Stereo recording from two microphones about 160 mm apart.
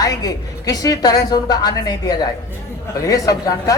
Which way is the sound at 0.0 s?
20° left (ahead or behind).